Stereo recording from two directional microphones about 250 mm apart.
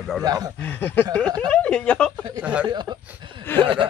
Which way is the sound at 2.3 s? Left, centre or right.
Centre.